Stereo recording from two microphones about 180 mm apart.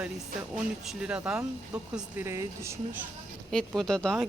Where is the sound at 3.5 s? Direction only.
5° left (ahead or behind).